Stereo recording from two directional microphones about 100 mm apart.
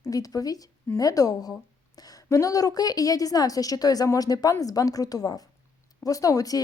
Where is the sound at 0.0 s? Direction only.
35° left (ahead or behind).